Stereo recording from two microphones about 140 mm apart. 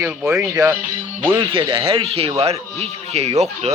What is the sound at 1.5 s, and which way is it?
Speech, 40° right (ahead or behind).